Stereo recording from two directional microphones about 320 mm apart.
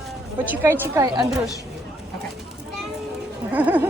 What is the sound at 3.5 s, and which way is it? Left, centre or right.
Speech, centre.